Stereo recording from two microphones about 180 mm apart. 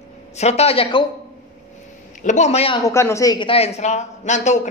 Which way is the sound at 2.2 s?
40° left (ahead or behind).